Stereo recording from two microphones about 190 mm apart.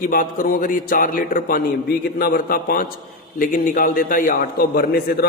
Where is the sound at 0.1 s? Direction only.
50° left (ahead or behind).